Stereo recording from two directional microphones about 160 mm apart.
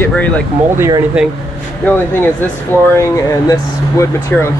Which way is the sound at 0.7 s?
15° right (ahead or behind).